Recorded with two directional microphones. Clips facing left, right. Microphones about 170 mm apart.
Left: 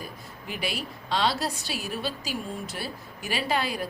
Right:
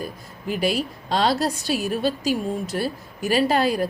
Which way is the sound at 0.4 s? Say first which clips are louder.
Right 10 dB; 40° right (ahead or behind).